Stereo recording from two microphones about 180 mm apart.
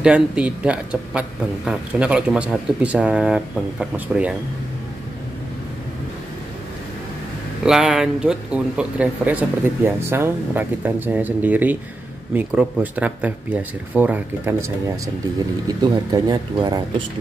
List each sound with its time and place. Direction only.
0.0 s speech: 5° right (ahead or behind)
7.6 s speech: 5° right (ahead or behind)
15.6 s speech: 20° right (ahead or behind)